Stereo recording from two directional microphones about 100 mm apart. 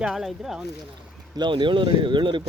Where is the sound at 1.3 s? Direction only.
50° right (ahead or behind).